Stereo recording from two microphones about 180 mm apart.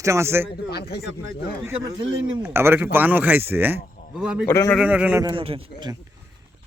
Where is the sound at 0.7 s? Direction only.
65° left (ahead or behind).